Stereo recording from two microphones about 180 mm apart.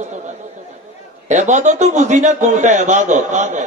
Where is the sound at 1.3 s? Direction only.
40° right (ahead or behind).